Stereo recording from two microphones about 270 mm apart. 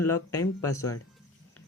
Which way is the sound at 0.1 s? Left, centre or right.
Centre.